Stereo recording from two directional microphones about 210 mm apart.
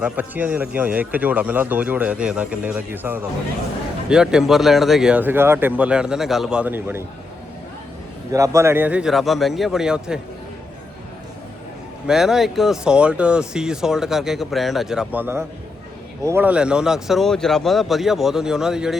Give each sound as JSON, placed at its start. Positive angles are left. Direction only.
{"t": 0.0, "sound": "speech", "side_deg": -10}
{"t": 8.3, "sound": "speech", "side_deg": -15}
{"t": 12.0, "sound": "speech", "side_deg": 0}